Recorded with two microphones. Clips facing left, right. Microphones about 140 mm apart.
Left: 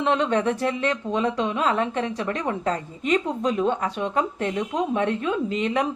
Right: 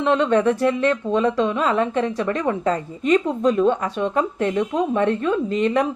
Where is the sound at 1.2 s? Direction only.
45° right (ahead or behind).